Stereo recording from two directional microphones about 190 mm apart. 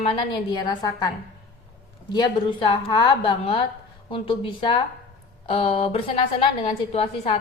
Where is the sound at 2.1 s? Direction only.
25° left (ahead or behind).